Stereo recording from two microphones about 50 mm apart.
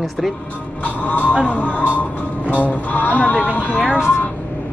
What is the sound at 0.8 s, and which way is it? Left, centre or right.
Music, left.